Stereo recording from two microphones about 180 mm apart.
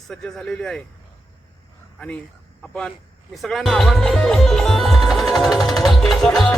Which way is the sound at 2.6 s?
5° left (ahead or behind).